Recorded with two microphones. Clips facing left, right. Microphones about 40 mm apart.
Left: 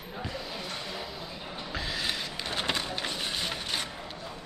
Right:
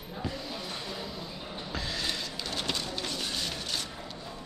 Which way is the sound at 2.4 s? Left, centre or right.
Left.